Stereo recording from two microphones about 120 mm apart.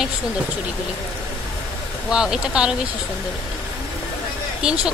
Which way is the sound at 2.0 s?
5° right (ahead or behind).